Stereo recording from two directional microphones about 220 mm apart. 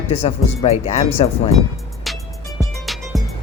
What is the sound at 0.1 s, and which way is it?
Speech, 30° left (ahead or behind).